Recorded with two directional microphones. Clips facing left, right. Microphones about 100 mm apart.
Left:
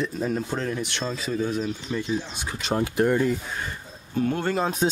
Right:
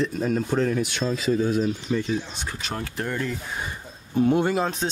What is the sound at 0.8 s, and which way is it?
Speech, 5° right (ahead or behind).